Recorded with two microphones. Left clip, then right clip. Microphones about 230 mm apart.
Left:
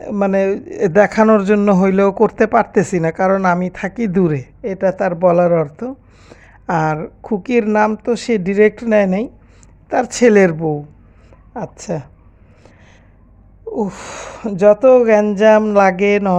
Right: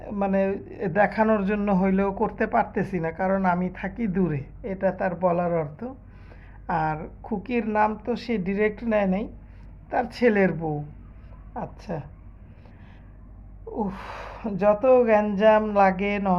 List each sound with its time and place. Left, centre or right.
0.0 s speech: left
13.7 s speech: left